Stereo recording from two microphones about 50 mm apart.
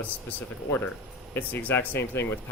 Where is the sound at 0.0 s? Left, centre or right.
Left.